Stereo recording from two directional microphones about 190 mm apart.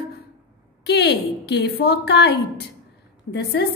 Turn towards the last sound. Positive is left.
turn(degrees=60)  # may be behind; listen again after turning